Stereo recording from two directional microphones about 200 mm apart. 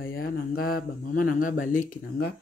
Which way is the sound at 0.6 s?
50° left (ahead or behind).